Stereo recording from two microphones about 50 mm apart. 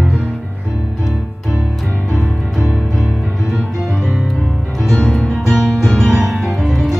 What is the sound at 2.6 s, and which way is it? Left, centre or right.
Music, centre.